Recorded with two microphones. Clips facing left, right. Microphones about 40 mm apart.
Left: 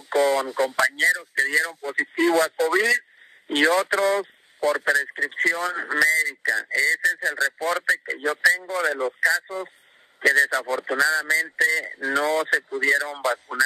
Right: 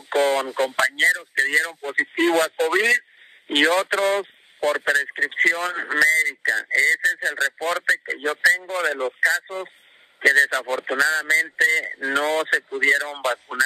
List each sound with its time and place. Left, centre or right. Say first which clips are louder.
0.1 s radio: even; right
0.7 s speech: right 2 dB; right